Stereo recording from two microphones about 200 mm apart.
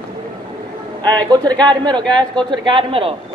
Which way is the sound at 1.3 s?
20° right (ahead or behind).